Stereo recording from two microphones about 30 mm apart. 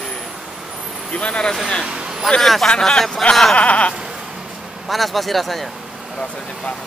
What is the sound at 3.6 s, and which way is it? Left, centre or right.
Sheep, left.